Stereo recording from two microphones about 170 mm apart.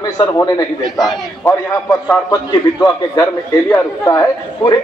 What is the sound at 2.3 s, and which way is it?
A man's voice, 20° left (ahead or behind).